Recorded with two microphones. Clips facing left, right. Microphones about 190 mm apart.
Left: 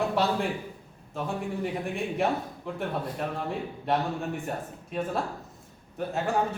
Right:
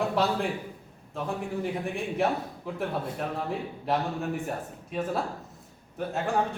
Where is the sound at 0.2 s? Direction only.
Centre (ahead or behind).